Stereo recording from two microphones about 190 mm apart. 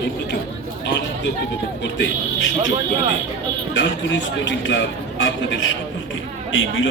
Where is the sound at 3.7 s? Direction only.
75° left (ahead or behind).